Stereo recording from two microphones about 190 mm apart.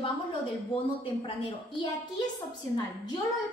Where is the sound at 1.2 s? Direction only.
25° left (ahead or behind).